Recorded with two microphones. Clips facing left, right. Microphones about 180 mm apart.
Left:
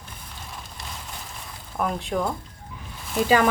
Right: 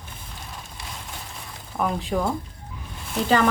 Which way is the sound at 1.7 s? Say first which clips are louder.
Right 1 dB; centre (ahead or behind).